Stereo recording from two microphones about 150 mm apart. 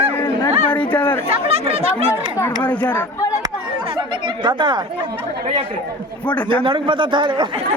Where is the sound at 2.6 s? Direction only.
10° left (ahead or behind).